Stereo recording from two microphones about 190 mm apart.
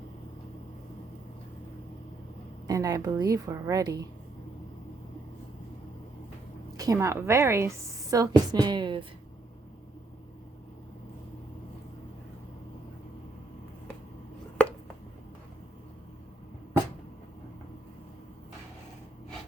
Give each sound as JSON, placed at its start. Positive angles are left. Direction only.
{"t": 2.6, "sound": "a woman's voice", "side_deg": -20}
{"t": 6.7, "sound": "a woman's voice", "side_deg": -15}